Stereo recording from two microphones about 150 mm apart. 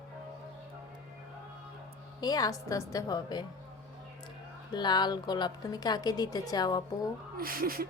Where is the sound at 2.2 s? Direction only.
25° left (ahead or behind).